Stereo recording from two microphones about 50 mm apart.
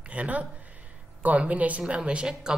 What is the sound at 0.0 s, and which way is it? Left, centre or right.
A woman's voice, right.